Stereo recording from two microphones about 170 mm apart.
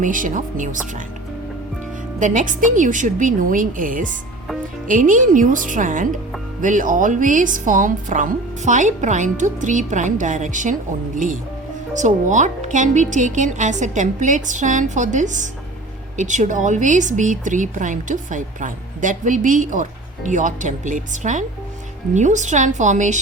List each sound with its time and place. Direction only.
0.0 s speech: 50° right (ahead or behind)
2.1 s speech: 50° right (ahead or behind)